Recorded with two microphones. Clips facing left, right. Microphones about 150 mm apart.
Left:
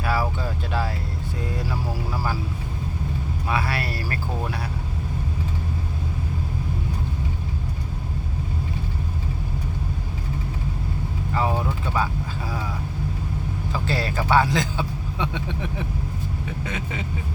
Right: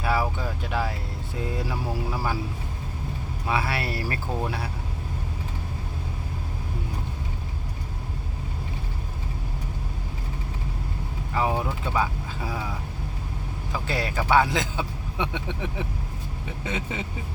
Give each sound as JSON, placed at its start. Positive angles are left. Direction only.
{"t": 0.0, "sound": "a sound", "side_deg": -20}
{"t": 3.5, "sound": "speech", "side_deg": -20}
{"t": 11.3, "sound": "vehicle", "side_deg": -15}
{"t": 13.7, "sound": "speech", "side_deg": -15}